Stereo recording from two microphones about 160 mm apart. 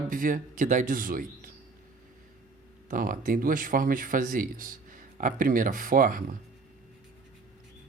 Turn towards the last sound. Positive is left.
turn(degrees=-60)  # may be behind; listen again after turning